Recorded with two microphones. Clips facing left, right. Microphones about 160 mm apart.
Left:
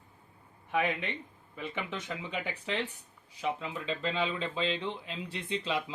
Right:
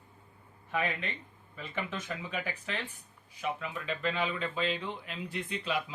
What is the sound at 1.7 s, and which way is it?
Speech, 20° left (ahead or behind).